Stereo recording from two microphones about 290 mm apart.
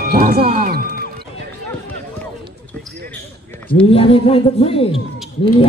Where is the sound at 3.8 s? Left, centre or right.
Centre.